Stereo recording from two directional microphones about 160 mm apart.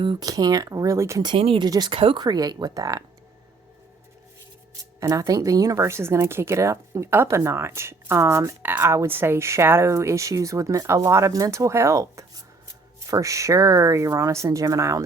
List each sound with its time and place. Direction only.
0.0 s speech: 30° right (ahead or behind)
1.3 s speech: 35° right (ahead or behind)
4.9 s speech: 20° right (ahead or behind)